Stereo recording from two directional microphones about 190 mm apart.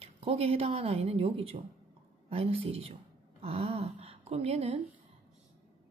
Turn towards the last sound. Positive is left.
turn(degrees=-30)  # may be behind; listen again after turning